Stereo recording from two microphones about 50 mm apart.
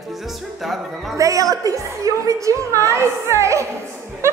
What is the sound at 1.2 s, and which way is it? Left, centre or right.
A woman's voice, right.